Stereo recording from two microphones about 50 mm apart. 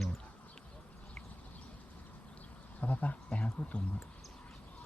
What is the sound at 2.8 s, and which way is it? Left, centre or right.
Speech, left.